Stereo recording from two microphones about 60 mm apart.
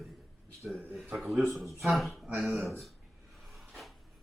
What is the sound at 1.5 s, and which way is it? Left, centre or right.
Speech, centre.